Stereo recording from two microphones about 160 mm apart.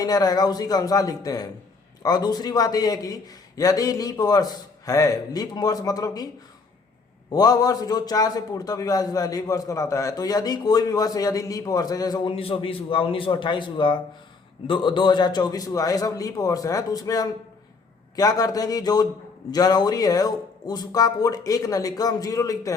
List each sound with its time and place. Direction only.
0.0 s a man's voice: 25° left (ahead or behind)
7.3 s a man's voice: 25° left (ahead or behind)